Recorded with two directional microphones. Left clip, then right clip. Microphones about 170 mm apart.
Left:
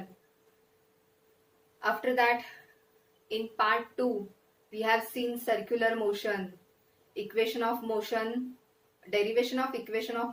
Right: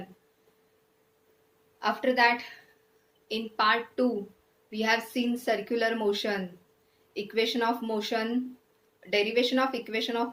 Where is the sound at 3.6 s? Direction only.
60° right (ahead or behind).